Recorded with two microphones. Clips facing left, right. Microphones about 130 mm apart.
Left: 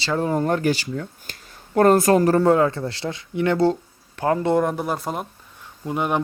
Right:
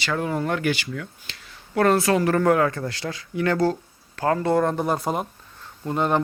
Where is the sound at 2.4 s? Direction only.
25° left (ahead or behind).